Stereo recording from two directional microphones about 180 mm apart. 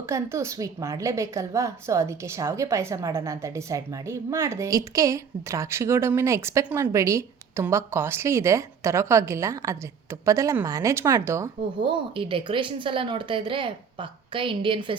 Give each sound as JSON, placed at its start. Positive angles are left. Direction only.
{"t": 0.1, "sound": "a woman's voice", "side_deg": -15}